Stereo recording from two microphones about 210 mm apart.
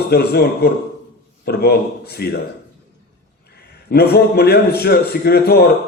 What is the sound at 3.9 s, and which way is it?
A man's voice, 50° left (ahead or behind).